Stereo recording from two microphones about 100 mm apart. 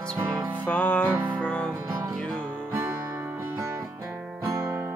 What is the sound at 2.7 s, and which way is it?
Music, 25° right (ahead or behind).